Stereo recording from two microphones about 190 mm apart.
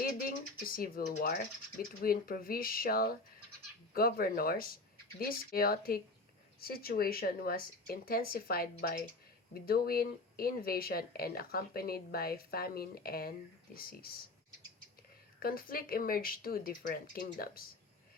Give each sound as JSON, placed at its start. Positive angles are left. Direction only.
{"t": 0.8, "sound": "speech", "side_deg": 50}
{"t": 15.4, "sound": "speech", "side_deg": 50}